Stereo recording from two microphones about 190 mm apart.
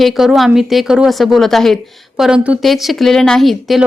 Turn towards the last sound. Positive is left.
turn(degrees=0)  # may be behind; listen again after turning